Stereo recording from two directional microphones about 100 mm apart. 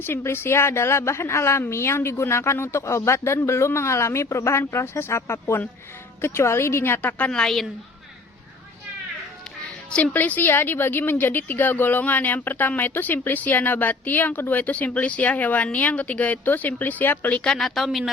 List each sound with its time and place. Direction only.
0.0 s a woman's voice: 25° left (ahead or behind)
7.3 s a woman's voice: 5° left (ahead or behind)
9.9 s a woman's voice: 15° left (ahead or behind)